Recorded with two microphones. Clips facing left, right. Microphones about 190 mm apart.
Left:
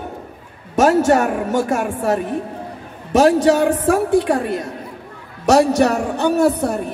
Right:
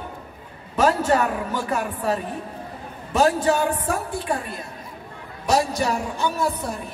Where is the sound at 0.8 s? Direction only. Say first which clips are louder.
Left 6 dB; 75° left (ahead or behind).